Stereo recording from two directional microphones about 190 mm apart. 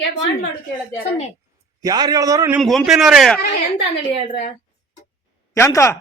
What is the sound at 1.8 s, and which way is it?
Speech, 20° right (ahead or behind).